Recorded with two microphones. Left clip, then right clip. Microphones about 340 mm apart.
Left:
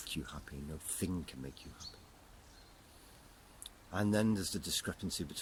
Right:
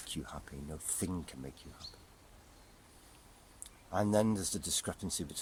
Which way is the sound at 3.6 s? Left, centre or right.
Centre.